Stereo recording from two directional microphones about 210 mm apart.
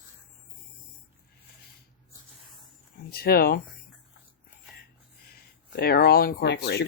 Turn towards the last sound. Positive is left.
turn(degrees=55)  # may be behind; listen again after turning